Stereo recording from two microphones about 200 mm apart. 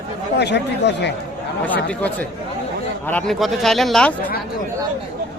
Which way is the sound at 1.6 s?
10° left (ahead or behind).